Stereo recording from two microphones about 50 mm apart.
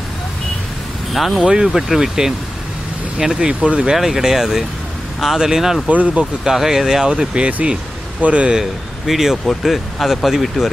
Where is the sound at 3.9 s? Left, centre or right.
Centre.